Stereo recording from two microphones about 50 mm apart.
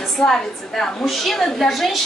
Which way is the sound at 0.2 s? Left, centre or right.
Centre.